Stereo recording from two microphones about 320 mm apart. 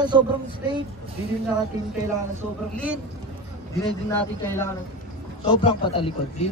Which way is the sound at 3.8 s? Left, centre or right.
Centre.